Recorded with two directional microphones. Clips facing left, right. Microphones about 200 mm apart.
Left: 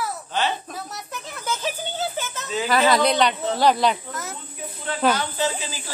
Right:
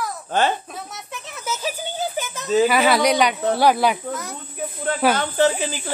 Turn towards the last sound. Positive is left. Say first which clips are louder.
# right 7 dB
turn(degrees=-55)  # may be behind; listen again after turning